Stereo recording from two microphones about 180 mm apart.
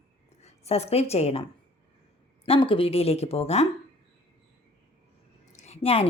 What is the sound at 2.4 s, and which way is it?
A woman's voice, 30° left (ahead or behind).